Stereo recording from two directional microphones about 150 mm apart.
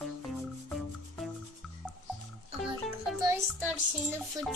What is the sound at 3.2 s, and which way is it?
Music, 20° right (ahead or behind).